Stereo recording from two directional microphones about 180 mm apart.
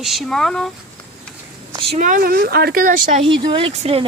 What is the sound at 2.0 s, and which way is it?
Speech, 50° right (ahead or behind).